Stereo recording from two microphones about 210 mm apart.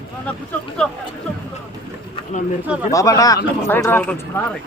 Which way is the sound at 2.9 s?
15° left (ahead or behind).